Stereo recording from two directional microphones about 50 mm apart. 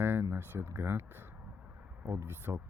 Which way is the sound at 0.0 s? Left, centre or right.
Right.